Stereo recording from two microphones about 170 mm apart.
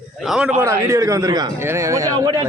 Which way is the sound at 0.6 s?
15° right (ahead or behind).